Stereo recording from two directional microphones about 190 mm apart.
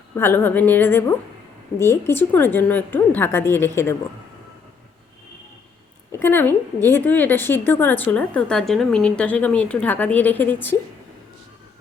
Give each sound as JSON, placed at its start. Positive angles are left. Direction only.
{"t": 0.2, "sound": "a woman's voice", "side_deg": 10}
{"t": 6.1, "sound": "a woman's voice", "side_deg": 10}